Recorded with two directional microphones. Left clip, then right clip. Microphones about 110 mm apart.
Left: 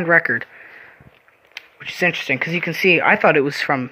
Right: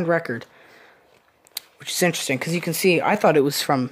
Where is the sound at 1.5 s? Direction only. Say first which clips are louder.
Even; 65° right (ahead or behind).